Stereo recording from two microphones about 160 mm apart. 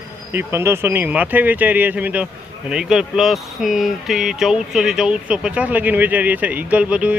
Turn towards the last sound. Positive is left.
turn(degrees=-10)  # may be behind; listen again after turning